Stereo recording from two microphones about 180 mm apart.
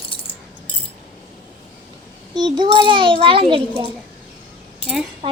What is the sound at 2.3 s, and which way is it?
A child's voice, 25° right (ahead or behind).